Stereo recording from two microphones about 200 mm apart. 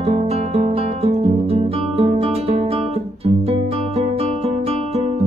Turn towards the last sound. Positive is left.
turn(degrees=-30)  # may be behind; listen again after turning